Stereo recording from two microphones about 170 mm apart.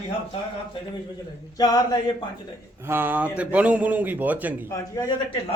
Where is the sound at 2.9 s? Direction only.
10° right (ahead or behind).